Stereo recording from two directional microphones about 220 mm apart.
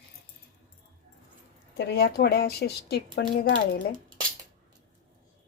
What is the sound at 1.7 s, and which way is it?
A woman's voice, 50° left (ahead or behind).